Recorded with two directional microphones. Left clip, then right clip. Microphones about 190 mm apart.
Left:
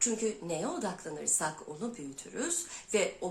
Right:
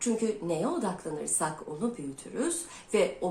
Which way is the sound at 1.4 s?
15° left (ahead or behind).